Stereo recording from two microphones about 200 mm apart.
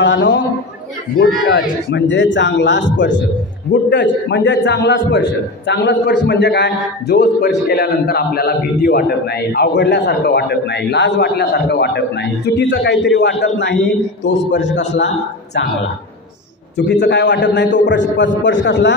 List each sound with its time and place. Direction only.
0.0 s a man's voice: 60° left (ahead or behind)
1.5 s a man's voice: 65° left (ahead or behind)
16.7 s a man's voice: 60° left (ahead or behind)